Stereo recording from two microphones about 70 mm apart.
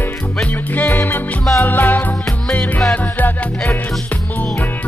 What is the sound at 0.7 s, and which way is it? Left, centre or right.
Music, left.